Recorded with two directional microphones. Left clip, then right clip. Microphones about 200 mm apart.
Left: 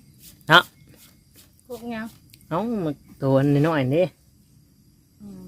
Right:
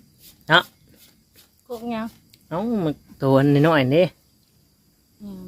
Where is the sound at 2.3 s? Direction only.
15° left (ahead or behind).